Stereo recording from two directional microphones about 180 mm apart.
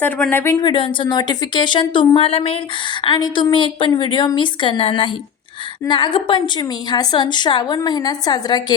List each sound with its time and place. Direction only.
0.0 s speech: 10° left (ahead or behind)
0.6 s a woman's voice: 25° left (ahead or behind)